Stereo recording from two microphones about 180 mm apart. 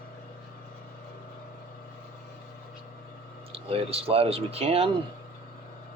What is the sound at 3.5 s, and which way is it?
Speech, 30° right (ahead or behind).